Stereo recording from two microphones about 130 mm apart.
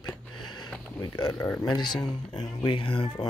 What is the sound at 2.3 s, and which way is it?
Speech, 35° left (ahead or behind).